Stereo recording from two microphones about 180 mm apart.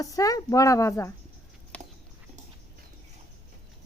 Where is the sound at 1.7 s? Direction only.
10° left (ahead or behind).